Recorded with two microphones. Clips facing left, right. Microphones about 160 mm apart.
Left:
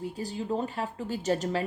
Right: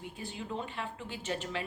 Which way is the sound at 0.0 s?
40° left (ahead or behind).